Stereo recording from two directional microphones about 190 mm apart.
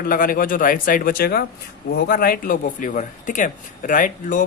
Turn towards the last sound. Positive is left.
turn(degrees=45)  # may be behind; listen again after turning